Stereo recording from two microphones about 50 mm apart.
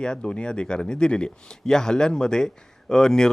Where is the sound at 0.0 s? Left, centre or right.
Centre.